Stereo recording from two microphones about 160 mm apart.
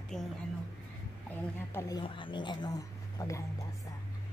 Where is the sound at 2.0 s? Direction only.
30° left (ahead or behind).